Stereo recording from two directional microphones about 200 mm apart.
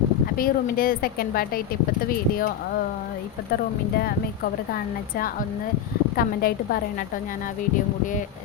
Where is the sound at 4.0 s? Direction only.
50° left (ahead or behind).